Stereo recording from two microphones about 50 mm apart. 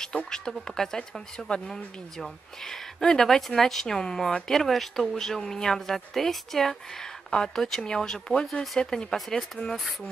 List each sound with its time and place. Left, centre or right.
0.3 s speech: centre
9.1 s speech: centre